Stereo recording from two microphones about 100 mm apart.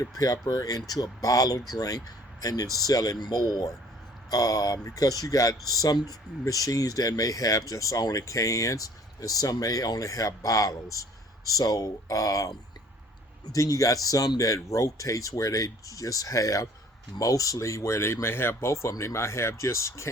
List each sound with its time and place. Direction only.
0.0 s speech: 35° left (ahead or behind)